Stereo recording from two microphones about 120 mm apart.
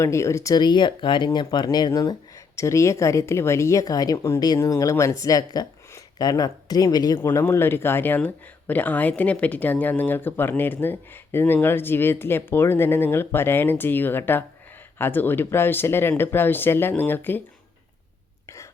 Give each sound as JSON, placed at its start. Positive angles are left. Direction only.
{"t": 0.0, "sound": "speech", "side_deg": 25}
{"t": 7.2, "sound": "speech", "side_deg": 20}